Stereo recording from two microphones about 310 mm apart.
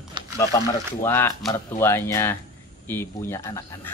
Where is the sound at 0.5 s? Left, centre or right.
Centre.